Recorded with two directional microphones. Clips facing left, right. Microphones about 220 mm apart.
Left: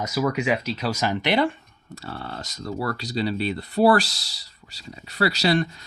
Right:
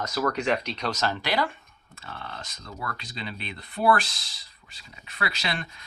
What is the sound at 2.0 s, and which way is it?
Speech, 40° left (ahead or behind).